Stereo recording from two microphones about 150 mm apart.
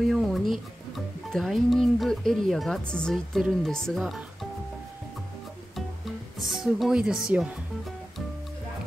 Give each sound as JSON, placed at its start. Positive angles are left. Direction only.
{"t": 0.0, "sound": "speech", "side_deg": 0}
{"t": 5.8, "sound": "music", "side_deg": 0}